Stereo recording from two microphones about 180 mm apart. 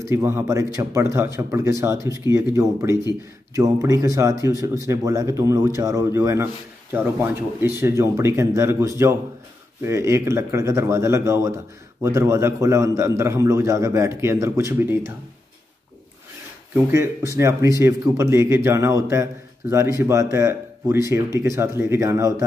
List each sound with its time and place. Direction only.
0.0 s a man's voice: 15° right (ahead or behind)
16.7 s a man's voice: 15° right (ahead or behind)